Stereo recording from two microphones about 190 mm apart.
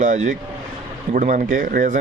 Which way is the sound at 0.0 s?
40° right (ahead or behind).